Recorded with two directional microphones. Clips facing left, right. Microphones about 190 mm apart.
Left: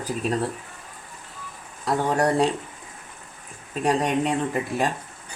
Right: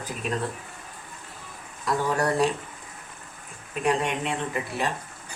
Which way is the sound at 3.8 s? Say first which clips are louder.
Left 3 dB; 40° left (ahead or behind).